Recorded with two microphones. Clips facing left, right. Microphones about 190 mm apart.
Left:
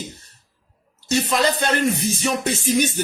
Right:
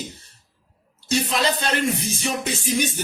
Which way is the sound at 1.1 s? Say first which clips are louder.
Left 2 dB; 50° left (ahead or behind).